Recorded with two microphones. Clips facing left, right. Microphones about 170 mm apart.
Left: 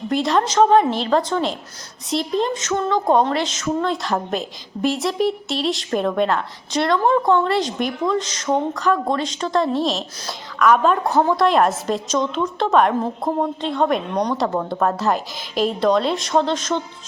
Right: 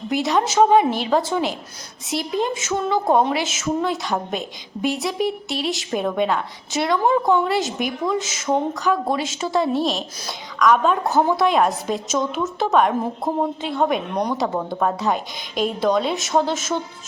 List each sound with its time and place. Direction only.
0.1 s a woman's voice: centre (ahead or behind)